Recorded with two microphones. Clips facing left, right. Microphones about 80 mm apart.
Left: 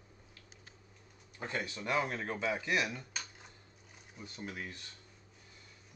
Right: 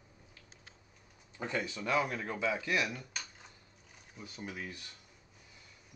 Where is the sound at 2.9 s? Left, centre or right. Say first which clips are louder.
Even; centre.